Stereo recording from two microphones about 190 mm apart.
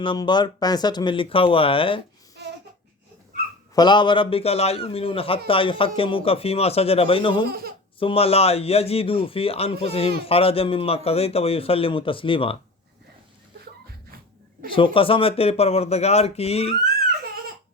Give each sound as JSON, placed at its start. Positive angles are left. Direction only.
{"t": 0.0, "sound": "speech", "side_deg": 25}
{"t": 2.4, "sound": "a sound", "side_deg": -60}
{"t": 3.8, "sound": "speech", "side_deg": 25}
{"t": 7.4, "sound": "speech", "side_deg": -55}
{"t": 7.9, "sound": "speech", "side_deg": 30}
{"t": 14.6, "sound": "speech", "side_deg": -50}
{"t": 14.9, "sound": "speech", "side_deg": 30}